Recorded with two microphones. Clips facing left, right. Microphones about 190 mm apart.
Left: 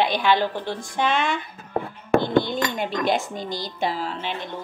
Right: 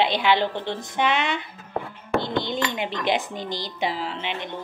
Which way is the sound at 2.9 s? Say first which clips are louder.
Left 2 dB; 50° left (ahead or behind).